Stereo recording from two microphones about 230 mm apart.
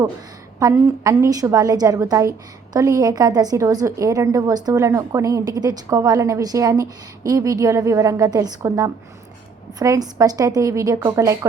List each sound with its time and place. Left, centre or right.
0.6 s a woman's voice: centre